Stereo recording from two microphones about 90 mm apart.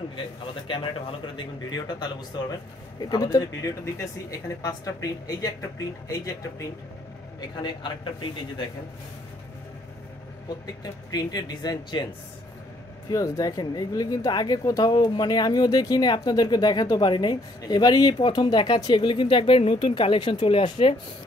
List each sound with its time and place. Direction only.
0.7 s a man's voice: 75° left (ahead or behind)
1.2 s a woman's voice: 60° left (ahead or behind)
3.3 s speech: 35° left (ahead or behind)
7.3 s speech: 60° left (ahead or behind)
10.8 s a woman's voice: 45° left (ahead or behind)
13.1 s a woman's voice: 40° left (ahead or behind); by 20.9 s 80° left